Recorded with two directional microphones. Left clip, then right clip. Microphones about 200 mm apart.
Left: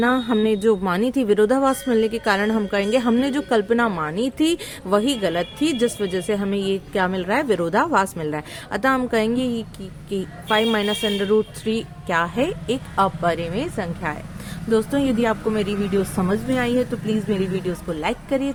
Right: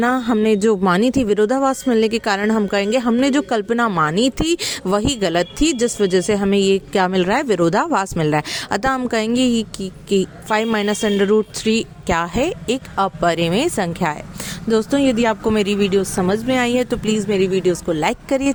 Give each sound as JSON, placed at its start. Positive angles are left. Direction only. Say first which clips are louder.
{"t": 0.0, "sound": "speech", "louder": "right 2 dB", "side_deg": -40}
{"t": 14.7, "sound": "speech", "louder": "right 3 dB", "side_deg": -40}